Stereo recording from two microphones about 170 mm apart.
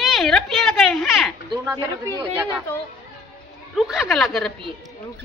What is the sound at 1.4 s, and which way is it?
Speech, 25° right (ahead or behind).